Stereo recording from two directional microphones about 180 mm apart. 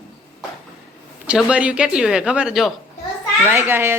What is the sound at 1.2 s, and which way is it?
A woman's voice, 5° right (ahead or behind).